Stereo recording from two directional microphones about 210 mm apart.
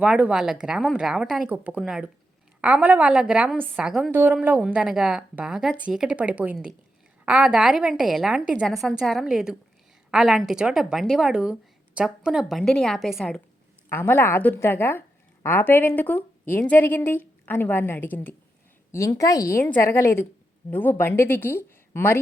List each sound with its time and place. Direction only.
0.0 s a woman's voice: 5° right (ahead or behind); by 22.2 s 10° left (ahead or behind)